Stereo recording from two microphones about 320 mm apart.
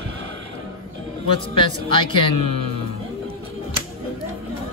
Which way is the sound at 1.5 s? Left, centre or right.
Centre.